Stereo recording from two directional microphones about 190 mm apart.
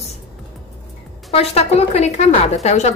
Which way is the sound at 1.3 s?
35° left (ahead or behind).